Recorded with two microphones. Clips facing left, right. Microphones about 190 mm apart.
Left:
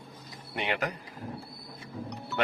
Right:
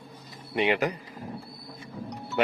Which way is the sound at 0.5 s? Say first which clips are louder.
Right 7 dB; 5° right (ahead or behind).